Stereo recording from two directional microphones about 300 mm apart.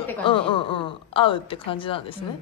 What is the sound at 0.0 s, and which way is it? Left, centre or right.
A woman's voice, centre.